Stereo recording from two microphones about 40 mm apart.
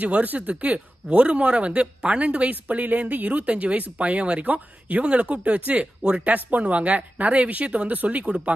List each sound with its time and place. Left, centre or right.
0.0 s speech: right